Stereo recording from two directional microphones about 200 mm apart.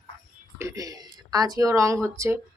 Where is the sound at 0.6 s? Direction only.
15° right (ahead or behind).